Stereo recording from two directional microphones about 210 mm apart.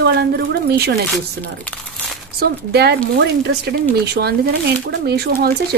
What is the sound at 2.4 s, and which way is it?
Speech, 50° right (ahead or behind).